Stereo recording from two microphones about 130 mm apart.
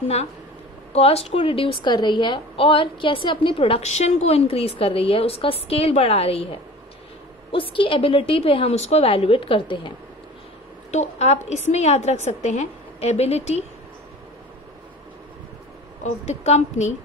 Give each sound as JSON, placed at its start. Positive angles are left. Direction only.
{"t": 0.9, "sound": "a woman's voice", "side_deg": 50}
{"t": 7.5, "sound": "a woman's voice", "side_deg": 40}
{"t": 10.9, "sound": "a woman's voice", "side_deg": 60}
{"t": 16.0, "sound": "a woman's voice", "side_deg": 60}